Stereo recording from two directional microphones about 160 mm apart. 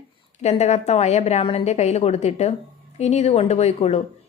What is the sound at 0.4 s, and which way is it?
A woman's voice, 45° left (ahead or behind).